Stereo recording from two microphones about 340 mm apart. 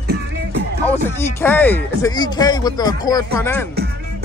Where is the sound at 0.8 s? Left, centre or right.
Centre.